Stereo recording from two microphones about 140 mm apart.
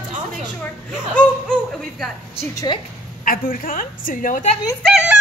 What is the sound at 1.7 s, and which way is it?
Speech, centre (ahead or behind).